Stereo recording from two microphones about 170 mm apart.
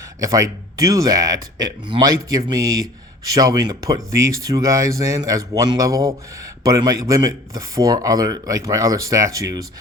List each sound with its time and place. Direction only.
0.2 s speech: 20° right (ahead or behind)